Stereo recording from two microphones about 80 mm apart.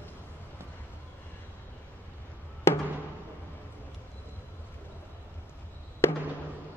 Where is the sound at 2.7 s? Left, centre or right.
Left.